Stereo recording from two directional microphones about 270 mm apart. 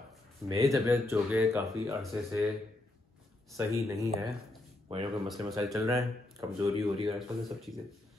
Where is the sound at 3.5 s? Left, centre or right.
Centre.